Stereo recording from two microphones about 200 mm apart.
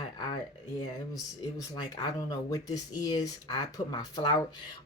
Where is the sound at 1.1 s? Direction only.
20° left (ahead or behind).